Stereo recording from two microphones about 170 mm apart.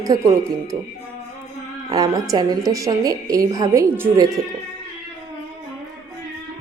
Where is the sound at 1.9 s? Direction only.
20° right (ahead or behind).